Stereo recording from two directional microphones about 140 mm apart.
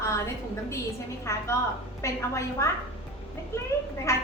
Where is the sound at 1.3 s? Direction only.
20° left (ahead or behind).